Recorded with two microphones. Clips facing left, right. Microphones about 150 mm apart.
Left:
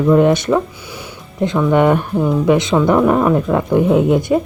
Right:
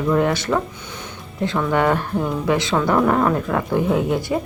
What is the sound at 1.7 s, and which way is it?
Speech, 15° left (ahead or behind).